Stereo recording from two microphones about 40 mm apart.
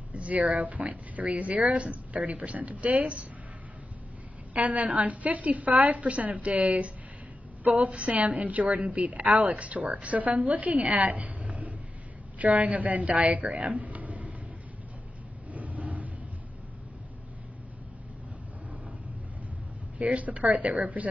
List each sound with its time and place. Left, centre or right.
0.1 s speech: right
4.6 s a woman's voice: right
13.7 s a sound: right
15.5 s vehicle: right
20.0 s speech: right